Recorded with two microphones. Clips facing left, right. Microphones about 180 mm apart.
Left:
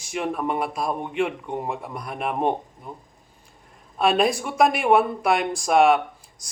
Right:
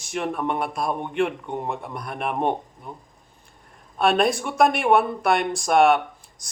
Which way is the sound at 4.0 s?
5° left (ahead or behind).